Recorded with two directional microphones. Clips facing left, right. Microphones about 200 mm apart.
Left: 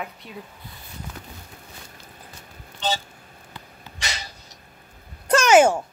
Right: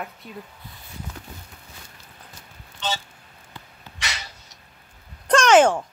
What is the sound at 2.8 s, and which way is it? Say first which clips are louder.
Speech: left 3 dB; 35° left (ahead or behind).